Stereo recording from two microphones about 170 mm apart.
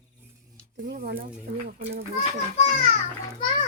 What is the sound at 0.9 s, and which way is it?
Speech, 70° right (ahead or behind).